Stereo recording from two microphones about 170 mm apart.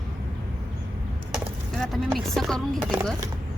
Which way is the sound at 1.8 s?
Centre (ahead or behind).